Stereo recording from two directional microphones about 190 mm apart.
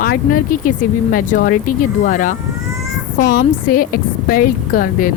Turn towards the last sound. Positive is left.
turn(degrees=45)  # may be behind; listen again after turning